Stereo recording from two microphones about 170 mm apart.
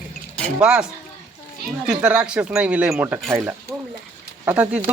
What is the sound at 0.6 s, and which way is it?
Speech, 5° right (ahead or behind).